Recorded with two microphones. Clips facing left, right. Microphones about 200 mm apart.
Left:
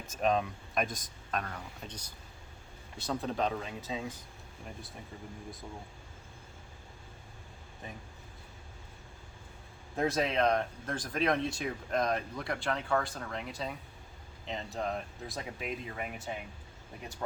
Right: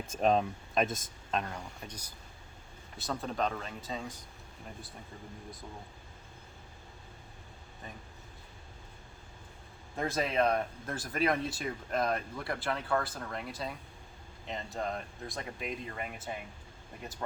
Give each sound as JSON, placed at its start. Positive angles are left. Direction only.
{"t": 0.2, "sound": "speech", "side_deg": -30}
{"t": 1.5, "sound": "speech", "side_deg": -10}
{"t": 3.0, "sound": "speech", "side_deg": 0}
{"t": 9.9, "sound": "speech", "side_deg": 0}